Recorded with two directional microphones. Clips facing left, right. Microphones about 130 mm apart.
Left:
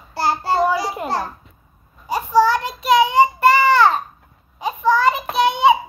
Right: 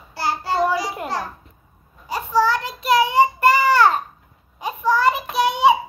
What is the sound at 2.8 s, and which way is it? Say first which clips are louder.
Child singing: left 2 dB; 5° right (ahead or behind).